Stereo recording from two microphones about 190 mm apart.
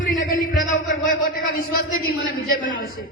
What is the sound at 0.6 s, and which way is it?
Speech, 45° left (ahead or behind).